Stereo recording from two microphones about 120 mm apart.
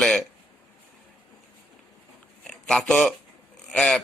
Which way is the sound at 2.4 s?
5° left (ahead or behind).